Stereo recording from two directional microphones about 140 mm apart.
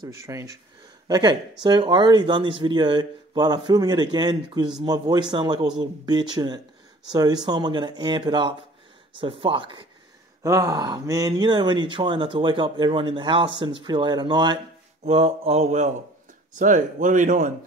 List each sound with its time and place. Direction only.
0.0 s speech: 25° right (ahead or behind)
10.4 s speech: 25° right (ahead or behind)
15.0 s mantra: 45° right (ahead or behind)
16.5 s speech: 65° right (ahead or behind)